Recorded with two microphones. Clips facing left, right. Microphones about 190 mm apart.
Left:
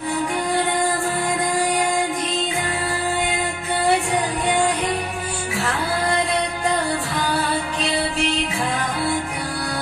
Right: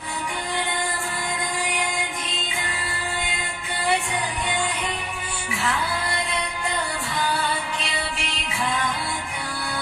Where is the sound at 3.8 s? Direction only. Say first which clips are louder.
Left 5 dB; 40° left (ahead or behind).